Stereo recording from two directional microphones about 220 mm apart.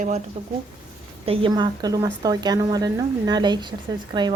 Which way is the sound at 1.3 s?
20° right (ahead or behind).